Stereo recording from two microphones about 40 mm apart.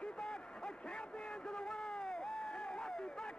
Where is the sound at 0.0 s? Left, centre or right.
Left.